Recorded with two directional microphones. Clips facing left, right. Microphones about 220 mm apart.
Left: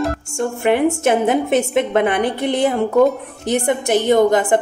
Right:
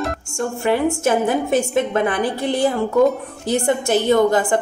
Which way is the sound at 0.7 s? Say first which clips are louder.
Left 3 dB; 20° left (ahead or behind).